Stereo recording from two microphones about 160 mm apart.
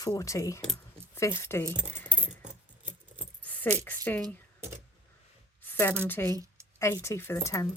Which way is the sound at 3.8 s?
10° left (ahead or behind).